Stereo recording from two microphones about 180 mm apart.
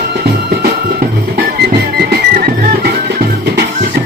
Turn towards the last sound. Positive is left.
turn(degrees=-55)  # may be behind; listen again after turning